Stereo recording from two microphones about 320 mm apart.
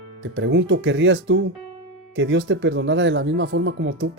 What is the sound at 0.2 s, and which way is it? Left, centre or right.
Speech, right.